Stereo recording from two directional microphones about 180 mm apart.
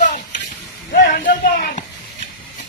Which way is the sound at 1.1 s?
50° left (ahead or behind).